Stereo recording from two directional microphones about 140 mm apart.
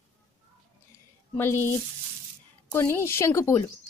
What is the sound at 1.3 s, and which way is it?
Speech, 15° left (ahead or behind).